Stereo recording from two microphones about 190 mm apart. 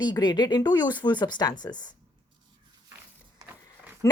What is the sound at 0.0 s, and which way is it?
A woman's voice, 20° left (ahead or behind).